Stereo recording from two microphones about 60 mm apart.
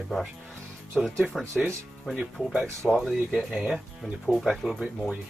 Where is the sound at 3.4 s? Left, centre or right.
Centre.